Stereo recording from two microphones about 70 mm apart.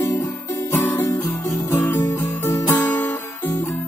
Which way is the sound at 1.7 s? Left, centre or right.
Left.